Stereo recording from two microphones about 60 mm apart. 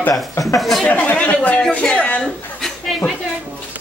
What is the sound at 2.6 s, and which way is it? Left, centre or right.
Chuckle, centre.